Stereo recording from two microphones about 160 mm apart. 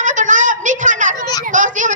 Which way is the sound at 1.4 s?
50° right (ahead or behind).